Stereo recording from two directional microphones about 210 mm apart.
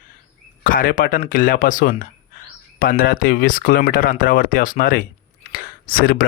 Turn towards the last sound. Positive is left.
turn(degrees=45)  # may be behind; listen again after turning